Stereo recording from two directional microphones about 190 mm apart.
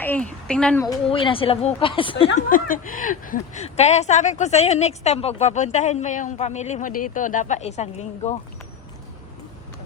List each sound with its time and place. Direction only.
0.0 s a woman's voice: 5° left (ahead or behind)
1.1 s a woman's voice: 30° left (ahead or behind)
2.5 s a woman's voice: 45° left (ahead or behind)